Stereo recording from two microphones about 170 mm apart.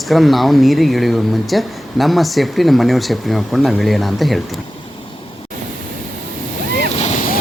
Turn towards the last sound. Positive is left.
turn(degrees=50)  # may be behind; listen again after turning